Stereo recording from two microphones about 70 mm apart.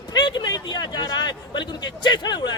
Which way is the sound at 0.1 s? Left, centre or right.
Left.